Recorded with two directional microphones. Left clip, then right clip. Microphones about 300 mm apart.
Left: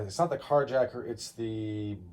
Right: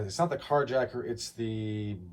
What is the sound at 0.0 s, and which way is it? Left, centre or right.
Speech, centre.